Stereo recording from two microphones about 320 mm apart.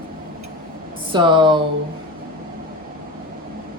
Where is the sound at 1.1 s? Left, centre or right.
Centre.